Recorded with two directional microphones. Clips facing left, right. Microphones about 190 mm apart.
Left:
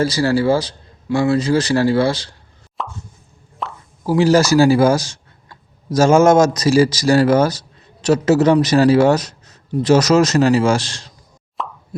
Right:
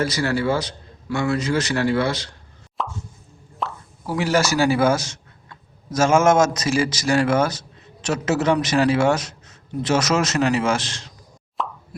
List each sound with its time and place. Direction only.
0.0 s a man's voice: 30° left (ahead or behind)
2.8 s plop: centre (ahead or behind)
4.0 s a man's voice: 35° left (ahead or behind)
11.5 s plop: centre (ahead or behind)